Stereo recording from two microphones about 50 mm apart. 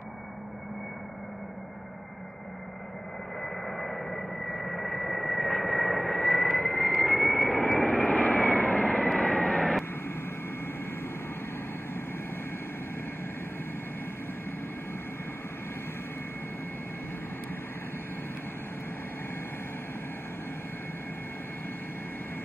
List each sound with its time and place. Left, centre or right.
3.4 s radio: centre
4.2 s a sound: centre
7.0 s vehicle: centre
8.1 s vehicle: left; by 9.8 s centre